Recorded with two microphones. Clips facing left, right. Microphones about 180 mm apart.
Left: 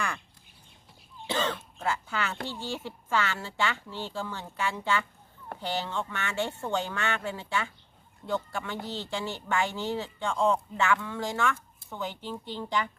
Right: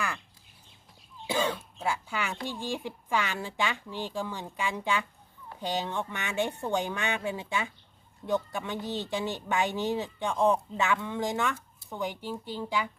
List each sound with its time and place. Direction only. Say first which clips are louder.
1.3 s cough: right 1 dB; 10° right (ahead or behind)
2.5 s speech: right 2 dB; 15° right (ahead or behind)